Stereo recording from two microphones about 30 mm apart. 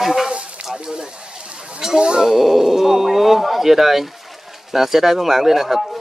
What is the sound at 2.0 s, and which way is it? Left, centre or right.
Speech, right.